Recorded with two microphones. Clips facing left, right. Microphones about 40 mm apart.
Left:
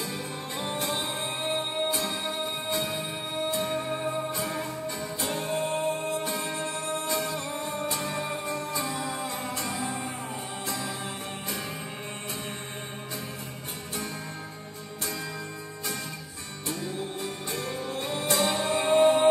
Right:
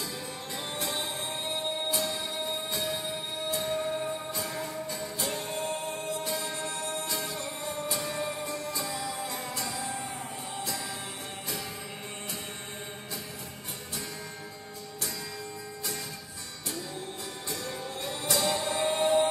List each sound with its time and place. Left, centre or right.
0.6 s music: left
4.3 s music: left
17.2 s music: left